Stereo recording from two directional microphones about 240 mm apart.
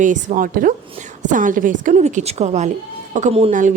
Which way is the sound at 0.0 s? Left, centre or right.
Right.